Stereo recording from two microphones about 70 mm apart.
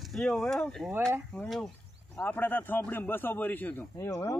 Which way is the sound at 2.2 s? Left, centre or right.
Left.